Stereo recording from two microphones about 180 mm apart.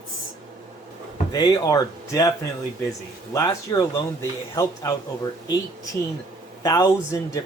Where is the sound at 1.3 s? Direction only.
20° left (ahead or behind).